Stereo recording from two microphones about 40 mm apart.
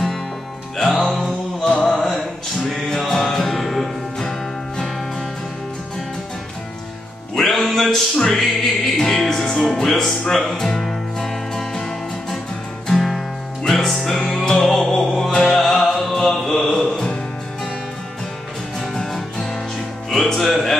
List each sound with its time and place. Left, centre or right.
0.7 s music: centre
7.3 s music: centre
14.2 s music: centre
14.6 s music: centre
18.8 s music: centre